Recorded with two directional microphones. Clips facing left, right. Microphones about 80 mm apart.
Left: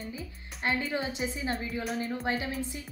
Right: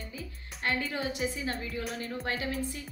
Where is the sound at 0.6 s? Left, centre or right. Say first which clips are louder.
Left 1 dB; left.